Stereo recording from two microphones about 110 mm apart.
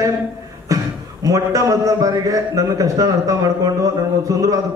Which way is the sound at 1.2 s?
30° right (ahead or behind).